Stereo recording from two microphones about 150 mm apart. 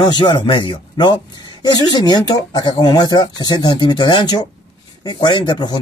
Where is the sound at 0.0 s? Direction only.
30° left (ahead or behind).